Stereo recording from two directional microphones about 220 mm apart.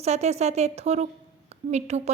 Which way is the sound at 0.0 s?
30° right (ahead or behind).